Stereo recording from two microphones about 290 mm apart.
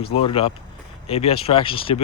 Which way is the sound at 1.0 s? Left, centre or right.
Left.